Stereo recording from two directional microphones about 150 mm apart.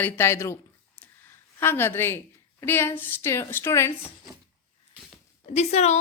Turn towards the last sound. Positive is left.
turn(degrees=50)  # may be behind; listen again after turning